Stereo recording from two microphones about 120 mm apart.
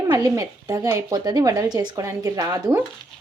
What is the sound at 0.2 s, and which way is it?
A woman's voice, 30° right (ahead or behind).